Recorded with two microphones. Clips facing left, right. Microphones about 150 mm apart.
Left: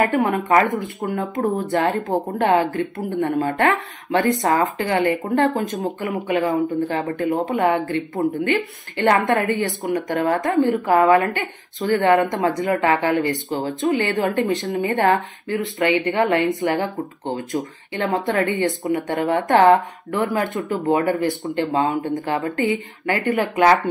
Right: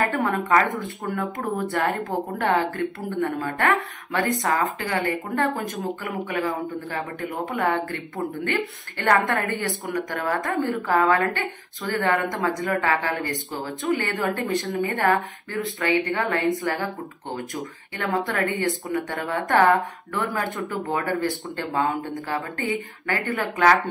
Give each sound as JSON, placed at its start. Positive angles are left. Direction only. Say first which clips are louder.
{"t": 0.0, "sound": "speech", "louder": "left 5 dB", "side_deg": 25}
{"t": 12.0, "sound": "speech", "louder": "left 5 dB", "side_deg": 30}
{"t": 17.5, "sound": "speech", "louder": "left 7 dB", "side_deg": 25}